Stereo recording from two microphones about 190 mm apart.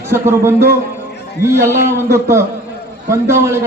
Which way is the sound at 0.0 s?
15° right (ahead or behind).